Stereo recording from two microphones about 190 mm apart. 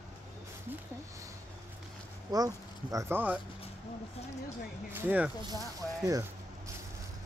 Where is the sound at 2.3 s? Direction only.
20° right (ahead or behind).